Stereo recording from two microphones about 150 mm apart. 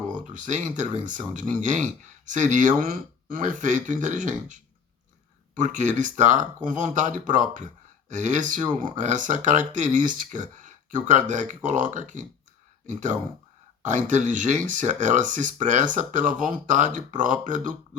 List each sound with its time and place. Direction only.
0.1 s speech: 55° right (ahead or behind)